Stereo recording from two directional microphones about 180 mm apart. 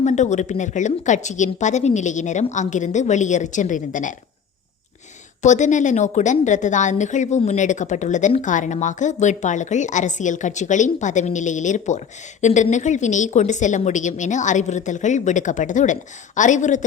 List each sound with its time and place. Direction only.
0.0 s a woman's voice: 40° left (ahead or behind)
5.4 s a woman's voice: 40° left (ahead or behind)